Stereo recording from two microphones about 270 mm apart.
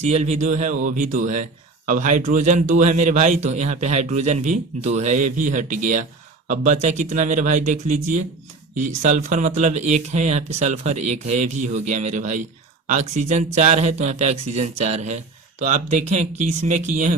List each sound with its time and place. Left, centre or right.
0.0 s speech: right